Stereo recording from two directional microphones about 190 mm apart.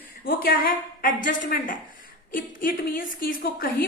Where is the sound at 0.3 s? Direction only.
50° left (ahead or behind).